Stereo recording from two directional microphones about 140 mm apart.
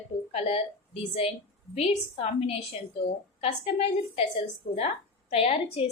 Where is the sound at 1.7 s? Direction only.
45° left (ahead or behind).